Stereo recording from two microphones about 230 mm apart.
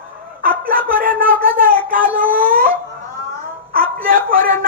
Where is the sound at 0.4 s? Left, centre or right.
Right.